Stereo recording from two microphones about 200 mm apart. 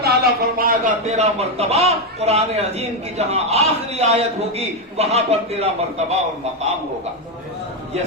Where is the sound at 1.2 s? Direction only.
30° right (ahead or behind).